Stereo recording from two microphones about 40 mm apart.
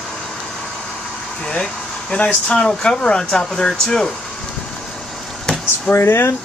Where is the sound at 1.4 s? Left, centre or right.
Centre.